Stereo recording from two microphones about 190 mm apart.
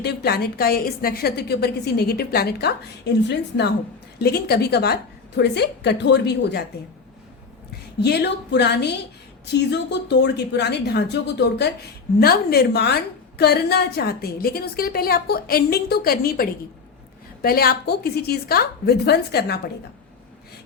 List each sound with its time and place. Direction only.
0.0 s a woman's voice: 60° left (ahead or behind)
8.0 s a woman's voice: 60° left (ahead or behind)